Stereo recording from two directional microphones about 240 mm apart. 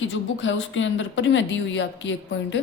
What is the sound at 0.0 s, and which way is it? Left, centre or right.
A woman's voice, left.